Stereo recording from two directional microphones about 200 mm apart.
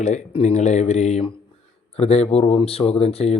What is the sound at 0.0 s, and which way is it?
Speech, 35° left (ahead or behind).